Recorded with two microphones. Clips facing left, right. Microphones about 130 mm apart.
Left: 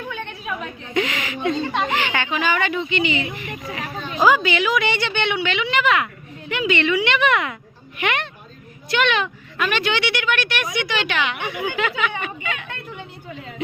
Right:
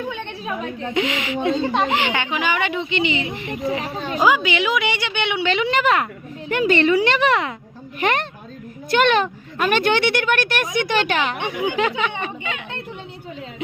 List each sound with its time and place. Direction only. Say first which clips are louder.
0.1 s a sound: right 1 dB; 20° right (ahead or behind)
0.9 s speech: right 1 dB; 20° right (ahead or behind)
1.9 s speech: right 1 dB; 20° right (ahead or behind)
4.2 s a woman's voice: left 1 dB; 15° right (ahead or behind)
5.4 s a woman's voice: right 2 dB; 35° right (ahead or behind)
11.3 s speech: right 3 dB; 30° right (ahead or behind)